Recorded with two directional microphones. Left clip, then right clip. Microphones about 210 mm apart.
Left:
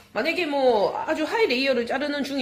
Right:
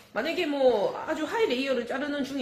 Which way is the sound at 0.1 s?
25° left (ahead or behind).